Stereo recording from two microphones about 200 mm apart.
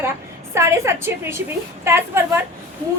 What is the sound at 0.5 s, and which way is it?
A woman's voice, 15° right (ahead or behind).